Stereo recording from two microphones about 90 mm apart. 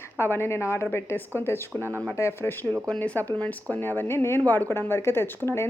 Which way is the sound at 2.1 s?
30° left (ahead or behind).